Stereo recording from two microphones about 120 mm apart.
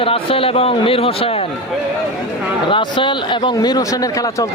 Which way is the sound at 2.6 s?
45° left (ahead or behind).